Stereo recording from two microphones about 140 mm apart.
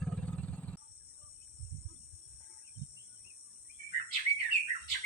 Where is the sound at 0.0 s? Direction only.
5° left (ahead or behind).